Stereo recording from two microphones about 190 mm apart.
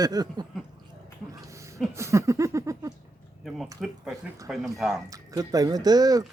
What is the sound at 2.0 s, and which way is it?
Speech, 15° right (ahead or behind).